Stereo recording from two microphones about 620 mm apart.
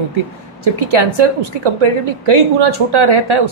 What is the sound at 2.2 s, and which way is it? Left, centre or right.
A woman's voice, right.